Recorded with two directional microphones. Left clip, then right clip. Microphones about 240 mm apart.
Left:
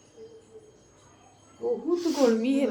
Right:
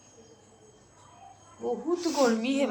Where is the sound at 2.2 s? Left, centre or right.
Centre.